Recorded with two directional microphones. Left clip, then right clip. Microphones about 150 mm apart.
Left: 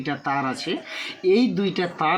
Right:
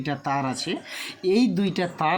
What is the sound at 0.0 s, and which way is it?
Speech, 45° right (ahead or behind).